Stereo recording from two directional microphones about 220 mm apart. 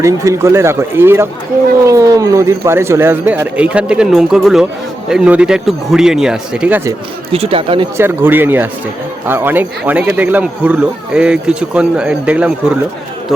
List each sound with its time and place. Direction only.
0.0 s speech: 15° right (ahead or behind)
7.3 s speech: 25° right (ahead or behind)
7.9 s speech: 10° right (ahead or behind)